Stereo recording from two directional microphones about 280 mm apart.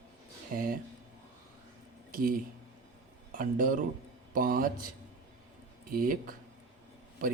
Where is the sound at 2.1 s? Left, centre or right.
Right.